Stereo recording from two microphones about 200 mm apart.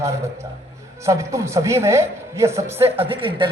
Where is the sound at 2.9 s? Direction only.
25° right (ahead or behind).